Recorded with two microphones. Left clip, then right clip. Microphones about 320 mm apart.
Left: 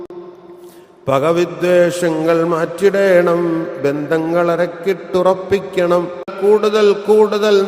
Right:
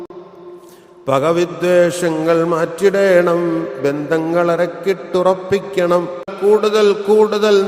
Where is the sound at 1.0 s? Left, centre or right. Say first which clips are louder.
Even; left.